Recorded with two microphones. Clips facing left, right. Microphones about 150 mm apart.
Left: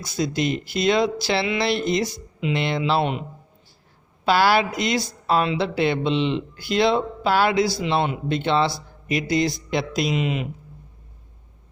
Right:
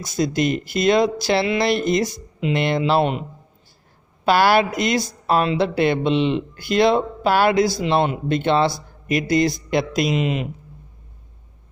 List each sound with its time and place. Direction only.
0.0 s speech: 45° right (ahead or behind)
4.3 s speech: 55° right (ahead or behind)